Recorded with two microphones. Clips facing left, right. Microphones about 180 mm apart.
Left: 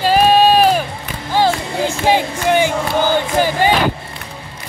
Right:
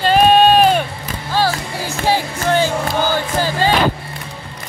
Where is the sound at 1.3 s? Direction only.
20° left (ahead or behind).